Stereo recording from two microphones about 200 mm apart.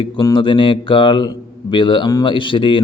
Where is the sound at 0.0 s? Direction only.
20° left (ahead or behind).